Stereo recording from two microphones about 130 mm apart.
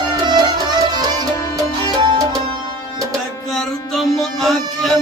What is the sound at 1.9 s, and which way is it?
Music, 35° right (ahead or behind).